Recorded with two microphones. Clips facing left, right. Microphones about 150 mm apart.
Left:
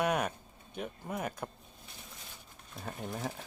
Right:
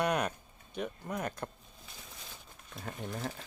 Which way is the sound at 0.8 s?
5° left (ahead or behind).